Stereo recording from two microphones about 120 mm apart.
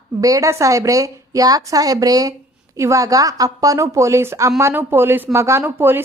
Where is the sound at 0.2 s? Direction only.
30° right (ahead or behind).